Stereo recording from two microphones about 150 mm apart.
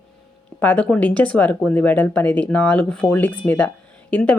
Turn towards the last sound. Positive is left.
turn(degrees=10)  # may be behind; listen again after turning